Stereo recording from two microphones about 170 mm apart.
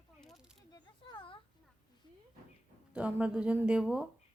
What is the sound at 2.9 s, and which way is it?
Speech, 5° right (ahead or behind).